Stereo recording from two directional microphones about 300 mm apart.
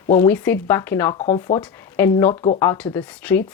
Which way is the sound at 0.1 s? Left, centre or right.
Centre.